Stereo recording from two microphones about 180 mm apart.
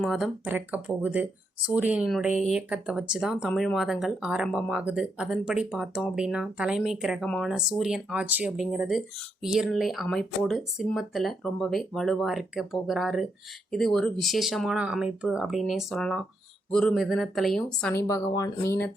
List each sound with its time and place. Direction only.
0.0 s speech: centre (ahead or behind)
2.3 s speech: 40° left (ahead or behind)
2.6 s speech: 5° right (ahead or behind)
17.9 s speech: 20° left (ahead or behind)